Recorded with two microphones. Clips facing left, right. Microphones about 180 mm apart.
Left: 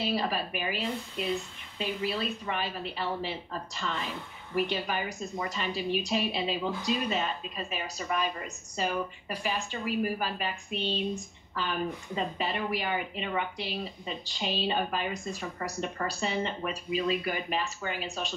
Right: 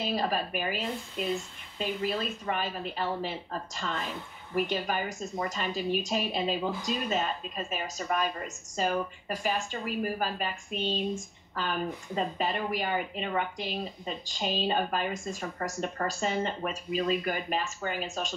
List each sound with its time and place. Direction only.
0.0 s a woman's voice: 45° right (ahead or behind)